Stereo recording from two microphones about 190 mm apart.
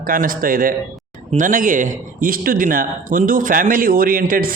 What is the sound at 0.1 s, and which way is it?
A man's voice, 50° right (ahead or behind).